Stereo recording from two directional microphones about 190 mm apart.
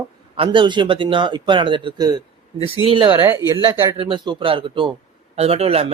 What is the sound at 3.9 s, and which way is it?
A man's voice, 25° right (ahead or behind).